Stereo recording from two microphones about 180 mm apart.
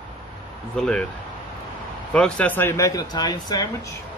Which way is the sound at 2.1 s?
5° left (ahead or behind).